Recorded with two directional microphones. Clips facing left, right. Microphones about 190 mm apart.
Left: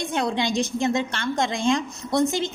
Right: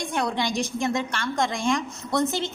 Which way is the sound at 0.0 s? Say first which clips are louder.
Left 2 dB; 20° left (ahead or behind).